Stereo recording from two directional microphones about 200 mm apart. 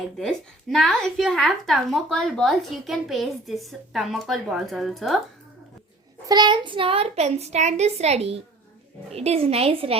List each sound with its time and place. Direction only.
0.2 s a woman's voice: centre (ahead or behind)
6.2 s a child's voice: 20° right (ahead or behind)